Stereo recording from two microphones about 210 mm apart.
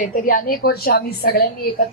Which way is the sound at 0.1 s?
40° left (ahead or behind).